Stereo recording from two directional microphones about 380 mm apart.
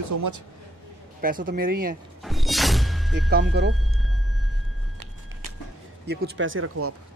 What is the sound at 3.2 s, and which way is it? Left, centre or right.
Speech, right.